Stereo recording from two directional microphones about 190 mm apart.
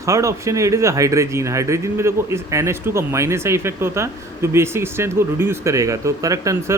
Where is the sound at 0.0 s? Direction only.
15° right (ahead or behind).